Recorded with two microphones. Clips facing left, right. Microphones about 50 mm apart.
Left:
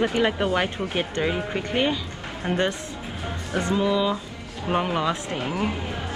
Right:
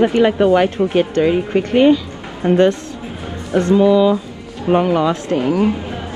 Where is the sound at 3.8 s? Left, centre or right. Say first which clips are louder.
Right 11 dB; centre.